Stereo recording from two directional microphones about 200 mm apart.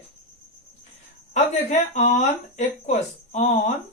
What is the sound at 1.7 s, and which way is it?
A woman's voice, 35° left (ahead or behind).